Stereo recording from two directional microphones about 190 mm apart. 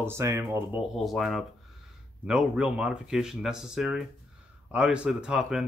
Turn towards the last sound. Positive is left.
turn(degrees=-5)  # may be behind; listen again after turning